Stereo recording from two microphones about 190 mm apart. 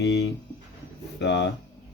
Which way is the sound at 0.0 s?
60° left (ahead or behind).